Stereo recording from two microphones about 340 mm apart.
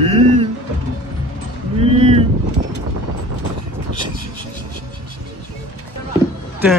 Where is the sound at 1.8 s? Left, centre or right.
Centre.